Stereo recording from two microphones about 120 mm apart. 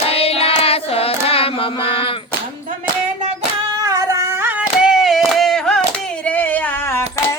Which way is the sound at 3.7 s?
30° right (ahead or behind).